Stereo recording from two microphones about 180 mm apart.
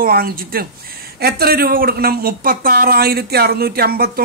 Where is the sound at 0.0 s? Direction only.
55° right (ahead or behind).